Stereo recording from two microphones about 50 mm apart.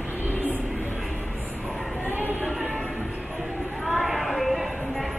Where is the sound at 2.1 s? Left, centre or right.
Right.